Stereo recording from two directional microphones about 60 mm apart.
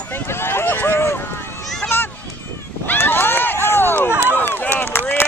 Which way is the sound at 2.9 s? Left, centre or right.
Left.